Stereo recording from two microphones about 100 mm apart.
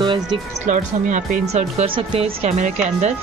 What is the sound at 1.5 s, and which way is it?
Speech, 80° right.